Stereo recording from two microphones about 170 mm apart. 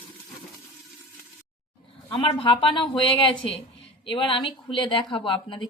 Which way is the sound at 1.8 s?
30° left (ahead or behind).